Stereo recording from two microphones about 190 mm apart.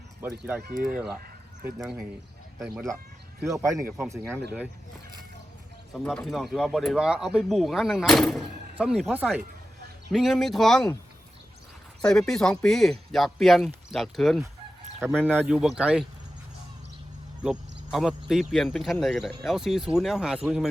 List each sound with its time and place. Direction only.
0.2 s speech: 10° right (ahead or behind)
0.6 s speech: 50° right (ahead or behind)
1.8 s speech: centre (ahead or behind)
3.5 s speech: 15° right (ahead or behind)
5.9 s speech: 5° left (ahead or behind)
12.0 s speech: 5° left (ahead or behind)
15.0 s speech: 10° right (ahead or behind)
17.4 s speech: 5° right (ahead or behind)